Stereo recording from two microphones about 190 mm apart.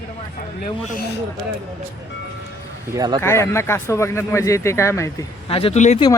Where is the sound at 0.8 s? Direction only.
55° left (ahead or behind).